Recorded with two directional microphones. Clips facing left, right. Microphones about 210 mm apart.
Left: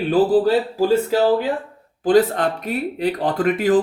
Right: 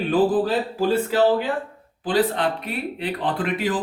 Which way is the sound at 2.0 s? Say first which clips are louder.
Left 5 dB; 45° left (ahead or behind).